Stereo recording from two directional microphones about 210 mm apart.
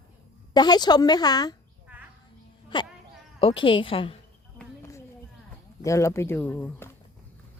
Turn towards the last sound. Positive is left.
turn(degrees=10)  # may be behind; listen again after turning